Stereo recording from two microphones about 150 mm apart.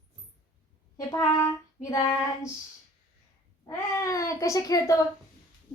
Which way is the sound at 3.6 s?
20° left (ahead or behind).